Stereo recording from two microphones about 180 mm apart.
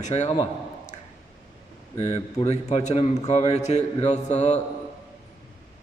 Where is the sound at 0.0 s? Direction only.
40° left (ahead or behind).